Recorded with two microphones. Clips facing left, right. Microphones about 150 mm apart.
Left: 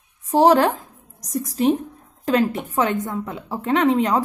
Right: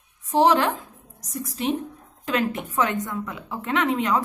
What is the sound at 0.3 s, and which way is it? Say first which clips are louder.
A woman's voice: left 4 dB; 40° left (ahead or behind).